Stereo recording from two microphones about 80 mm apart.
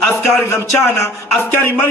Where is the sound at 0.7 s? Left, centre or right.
Left.